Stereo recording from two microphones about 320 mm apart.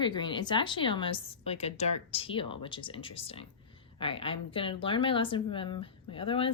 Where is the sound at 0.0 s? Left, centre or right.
Centre.